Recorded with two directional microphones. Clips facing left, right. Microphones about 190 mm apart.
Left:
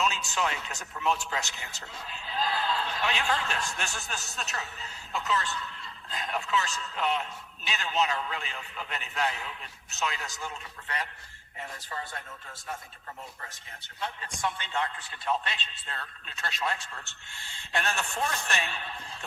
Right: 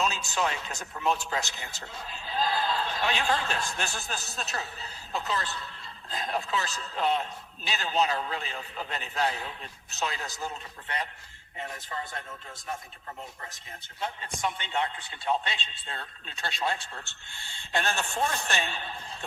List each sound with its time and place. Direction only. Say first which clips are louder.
0.0 s a man's voice: right 1 dB; 35° right (ahead or behind)
14.4 s a man's voice: right 1 dB; 20° right (ahead or behind)